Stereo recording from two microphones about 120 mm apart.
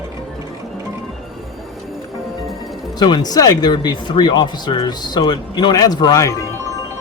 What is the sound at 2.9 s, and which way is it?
Speech, 35° left (ahead or behind).